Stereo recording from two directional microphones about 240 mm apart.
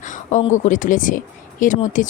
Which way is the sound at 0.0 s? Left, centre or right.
Left.